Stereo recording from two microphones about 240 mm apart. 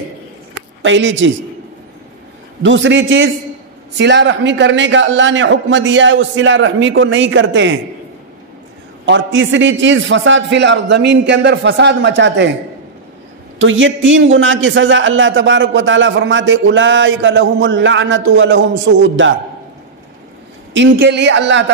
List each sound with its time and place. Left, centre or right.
0.8 s a man's voice: right
2.6 s a man's voice: right
9.0 s a man's voice: right
13.6 s a man's voice: right
20.7 s a man's voice: right